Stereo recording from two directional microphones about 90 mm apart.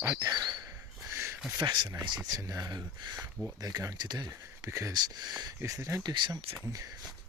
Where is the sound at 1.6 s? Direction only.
60° right (ahead or behind).